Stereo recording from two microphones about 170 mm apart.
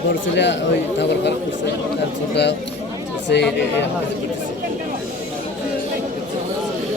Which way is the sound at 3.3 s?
80° left.